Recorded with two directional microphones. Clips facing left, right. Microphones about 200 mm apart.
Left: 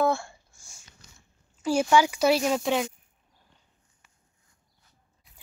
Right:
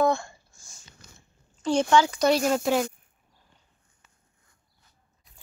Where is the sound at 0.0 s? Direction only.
10° left (ahead or behind).